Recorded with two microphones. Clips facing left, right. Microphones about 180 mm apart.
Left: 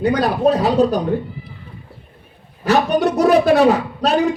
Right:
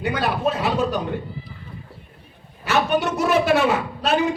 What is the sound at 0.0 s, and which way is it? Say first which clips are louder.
Speech: left 7 dB; 40° left (ahead or behind).